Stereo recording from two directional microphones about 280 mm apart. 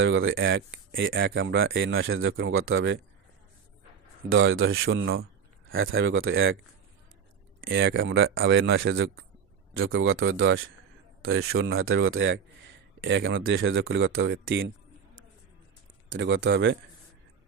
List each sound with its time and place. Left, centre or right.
0.0 s speech: right
4.3 s speech: right
7.6 s speech: right
16.1 s speech: right